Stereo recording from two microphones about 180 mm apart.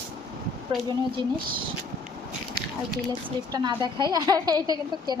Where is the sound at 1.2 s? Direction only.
25° right (ahead or behind).